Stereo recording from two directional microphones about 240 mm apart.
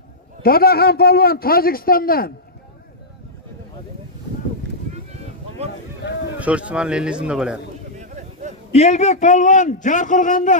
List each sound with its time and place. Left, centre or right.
0.4 s speech: left
6.4 s speech: centre
8.0 s a sound: right
8.7 s speech: left